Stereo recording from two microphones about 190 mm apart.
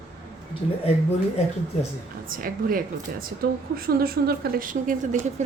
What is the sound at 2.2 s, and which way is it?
A woman's voice, 50° right (ahead or behind).